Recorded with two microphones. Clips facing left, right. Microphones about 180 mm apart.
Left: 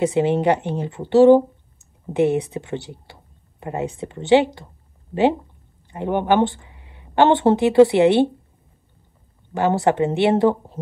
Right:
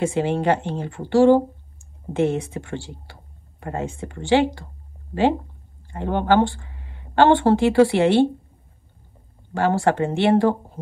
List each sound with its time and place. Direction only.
0.0 s speech: 20° left (ahead or behind)
5.9 s a woman's voice: 15° left (ahead or behind)
9.5 s speech: 20° left (ahead or behind)